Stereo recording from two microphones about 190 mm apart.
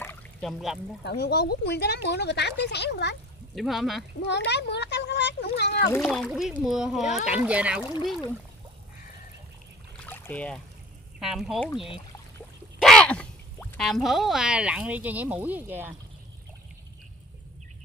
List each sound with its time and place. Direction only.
0.0 s pour: 5° left (ahead or behind)
1.0 s speech: 60° left (ahead or behind)
3.5 s speech: centre (ahead or behind)
4.3 s speech: 65° left (ahead or behind)
6.0 s speech: centre (ahead or behind)
10.0 s a sound: 10° left (ahead or behind)
11.1 s speech: centre (ahead or behind)
12.8 s speech: 5° left (ahead or behind)